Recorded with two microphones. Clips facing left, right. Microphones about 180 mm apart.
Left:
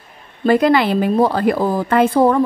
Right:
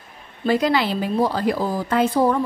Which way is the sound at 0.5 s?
55° left (ahead or behind).